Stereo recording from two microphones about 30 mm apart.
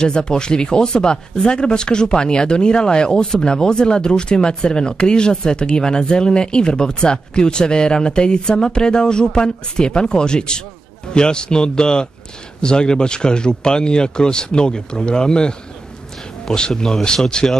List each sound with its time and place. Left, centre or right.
0.0 s speech: left